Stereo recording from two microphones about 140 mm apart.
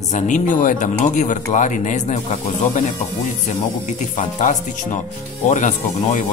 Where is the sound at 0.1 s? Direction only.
65° left (ahead or behind).